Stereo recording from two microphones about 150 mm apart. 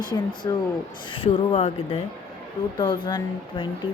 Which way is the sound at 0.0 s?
30° left (ahead or behind).